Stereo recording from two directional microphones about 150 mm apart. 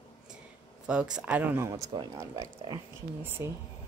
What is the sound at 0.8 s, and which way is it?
Speech, 5° right (ahead or behind).